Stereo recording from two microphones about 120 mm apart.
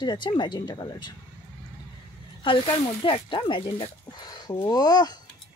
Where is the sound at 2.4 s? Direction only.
45° left (ahead or behind).